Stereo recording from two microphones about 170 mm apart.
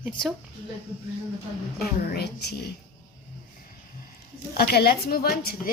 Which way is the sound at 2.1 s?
75° left (ahead or behind).